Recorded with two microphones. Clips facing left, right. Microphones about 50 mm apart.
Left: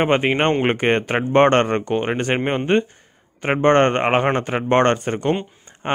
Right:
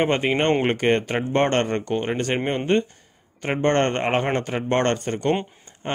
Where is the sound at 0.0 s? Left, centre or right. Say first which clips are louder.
Left 3 dB; left.